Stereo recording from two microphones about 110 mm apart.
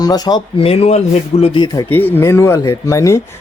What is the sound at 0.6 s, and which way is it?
Speech, 65° left (ahead or behind).